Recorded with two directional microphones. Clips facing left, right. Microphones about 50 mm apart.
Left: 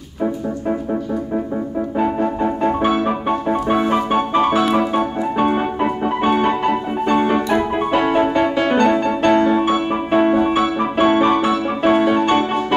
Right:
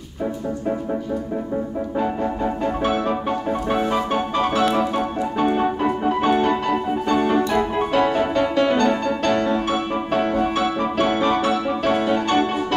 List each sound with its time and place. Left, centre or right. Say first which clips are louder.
2.0 s music: left 4 dB; left